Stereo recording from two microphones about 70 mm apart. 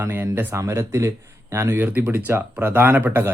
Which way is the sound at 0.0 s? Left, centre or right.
Right.